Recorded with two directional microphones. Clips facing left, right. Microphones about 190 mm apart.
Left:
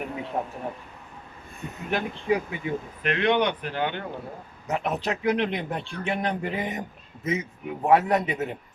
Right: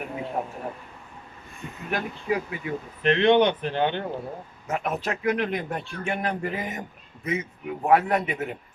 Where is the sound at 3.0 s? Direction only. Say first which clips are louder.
Right 5 dB; 30° right (ahead or behind).